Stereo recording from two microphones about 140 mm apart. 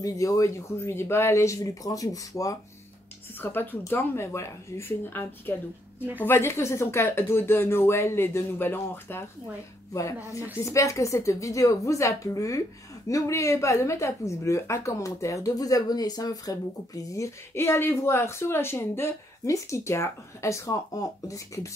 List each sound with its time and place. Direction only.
0.0 s speech: 25° left (ahead or behind)
3.3 s speech: 15° left (ahead or behind)